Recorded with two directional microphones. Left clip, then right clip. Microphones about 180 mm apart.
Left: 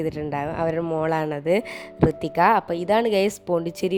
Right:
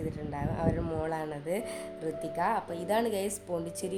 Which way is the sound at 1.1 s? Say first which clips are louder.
Left 12 dB; 50° left (ahead or behind).